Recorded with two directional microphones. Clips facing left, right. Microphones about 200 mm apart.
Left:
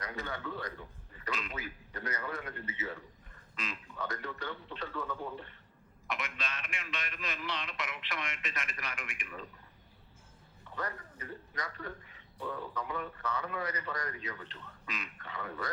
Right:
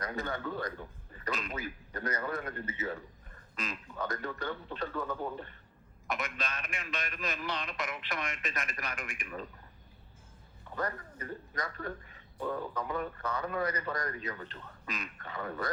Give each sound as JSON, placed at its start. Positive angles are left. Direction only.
{"t": 0.0, "sound": "a man's voice", "side_deg": -45}
{"t": 10.8, "sound": "a man's voice", "side_deg": -45}